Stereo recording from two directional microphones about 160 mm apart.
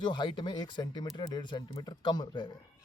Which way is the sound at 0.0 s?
30° left (ahead or behind).